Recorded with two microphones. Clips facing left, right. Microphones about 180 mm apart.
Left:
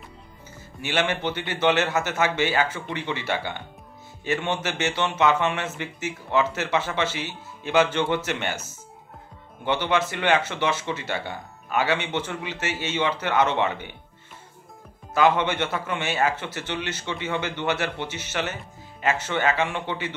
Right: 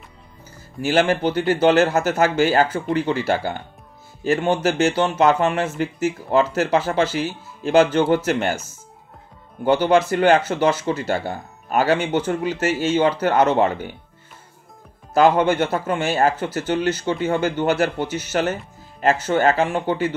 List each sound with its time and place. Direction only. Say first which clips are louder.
0.8 s a man's voice: right 7 dB; 40° right (ahead or behind)
9.7 s a man's voice: right 8 dB; 40° right (ahead or behind)
15.1 s a man's voice: right 5 dB; 40° right (ahead or behind)